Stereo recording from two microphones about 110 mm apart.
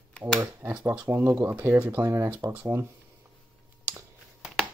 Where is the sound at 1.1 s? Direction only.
25° right (ahead or behind).